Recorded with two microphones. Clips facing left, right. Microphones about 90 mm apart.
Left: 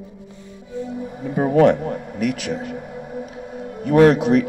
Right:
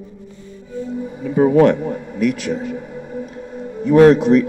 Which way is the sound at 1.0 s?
5° left (ahead or behind).